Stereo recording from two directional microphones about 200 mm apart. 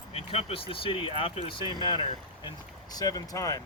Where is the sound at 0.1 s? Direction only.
30° left (ahead or behind).